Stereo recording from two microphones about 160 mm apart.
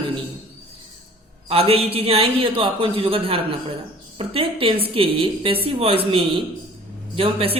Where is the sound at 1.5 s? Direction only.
35° right (ahead or behind).